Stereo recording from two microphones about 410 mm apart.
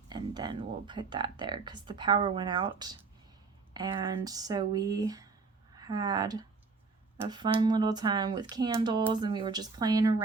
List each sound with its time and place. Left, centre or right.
0.1 s speech: centre